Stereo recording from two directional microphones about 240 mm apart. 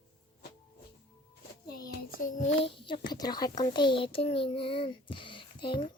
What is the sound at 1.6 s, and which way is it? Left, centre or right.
Child singing, left.